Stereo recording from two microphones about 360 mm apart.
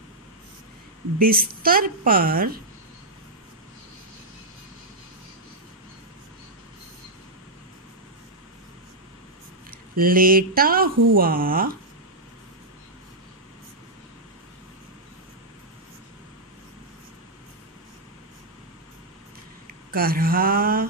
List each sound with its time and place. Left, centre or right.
1.2 s a woman's voice: right
9.7 s a woman's voice: right
19.9 s a woman's voice: right